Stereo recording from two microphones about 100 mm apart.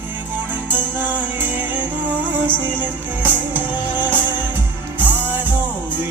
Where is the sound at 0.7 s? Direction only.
20° right (ahead or behind).